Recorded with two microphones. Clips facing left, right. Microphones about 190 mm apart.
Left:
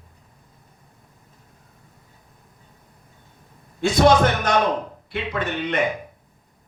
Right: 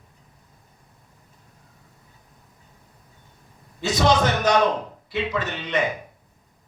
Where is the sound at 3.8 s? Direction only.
55° left (ahead or behind).